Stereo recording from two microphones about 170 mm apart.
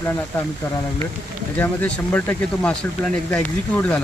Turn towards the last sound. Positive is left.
turn(degrees=10)  # may be behind; listen again after turning